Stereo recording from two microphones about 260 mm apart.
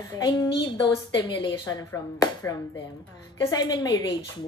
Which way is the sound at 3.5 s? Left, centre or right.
Centre.